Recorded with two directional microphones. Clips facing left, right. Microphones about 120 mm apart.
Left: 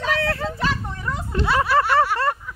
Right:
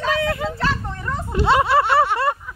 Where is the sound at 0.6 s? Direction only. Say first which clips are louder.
Right 1 dB; 15° left (ahead or behind).